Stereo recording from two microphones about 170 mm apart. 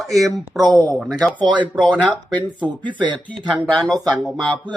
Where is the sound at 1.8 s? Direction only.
25° right (ahead or behind).